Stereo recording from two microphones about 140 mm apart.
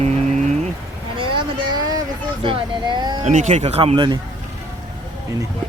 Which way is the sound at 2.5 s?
35° right (ahead or behind).